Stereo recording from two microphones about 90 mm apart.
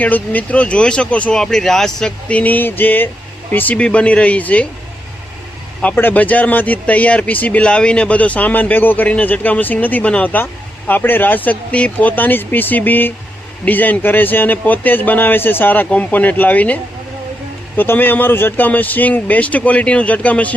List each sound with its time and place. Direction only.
0.0 s speech: 20° left (ahead or behind)
5.8 s speech: 20° left (ahead or behind)
17.7 s speech: 20° left (ahead or behind)